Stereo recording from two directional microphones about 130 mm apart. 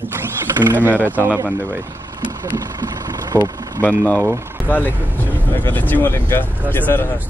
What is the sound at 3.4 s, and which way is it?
Speech, 25° right (ahead or behind).